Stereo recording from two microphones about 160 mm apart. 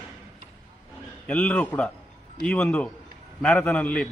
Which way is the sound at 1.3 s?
10° left (ahead or behind).